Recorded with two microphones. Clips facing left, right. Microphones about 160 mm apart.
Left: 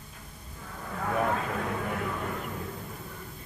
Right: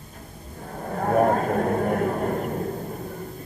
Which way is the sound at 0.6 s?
45° right (ahead or behind).